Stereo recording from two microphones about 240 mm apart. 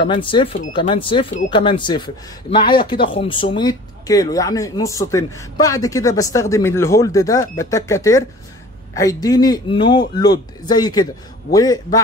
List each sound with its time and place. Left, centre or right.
0.0 s speech: left
2.6 s speech: left
2.9 s speech: left